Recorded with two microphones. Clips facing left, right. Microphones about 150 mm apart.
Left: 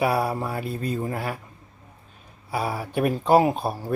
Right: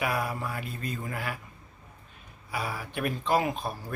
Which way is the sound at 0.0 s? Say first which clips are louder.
Left 7 dB; 35° left (ahead or behind).